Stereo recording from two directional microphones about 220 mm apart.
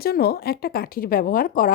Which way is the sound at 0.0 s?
45° left (ahead or behind).